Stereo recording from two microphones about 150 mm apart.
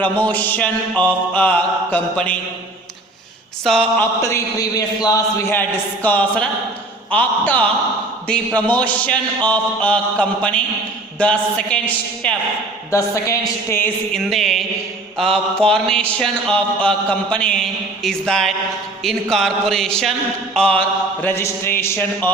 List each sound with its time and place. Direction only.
0.0 s a man's voice: 10° left (ahead or behind)
3.6 s a sound: 5° left (ahead or behind)
4.2 s a man's voice: 20° left (ahead or behind)
5.5 s a man's voice: 10° left (ahead or behind)
12.9 s a man's voice: 20° left (ahead or behind)
14.2 s a sound: centre (ahead or behind)
21.2 s a man's voice: 15° left (ahead or behind)